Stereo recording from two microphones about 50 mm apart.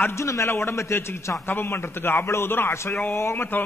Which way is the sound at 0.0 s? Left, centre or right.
Left.